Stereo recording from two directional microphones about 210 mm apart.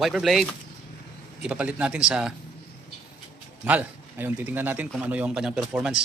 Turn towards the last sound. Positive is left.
turn(degrees=-5)  # may be behind; listen again after turning